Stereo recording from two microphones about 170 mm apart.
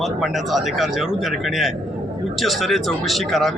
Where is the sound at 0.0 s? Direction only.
Centre (ahead or behind).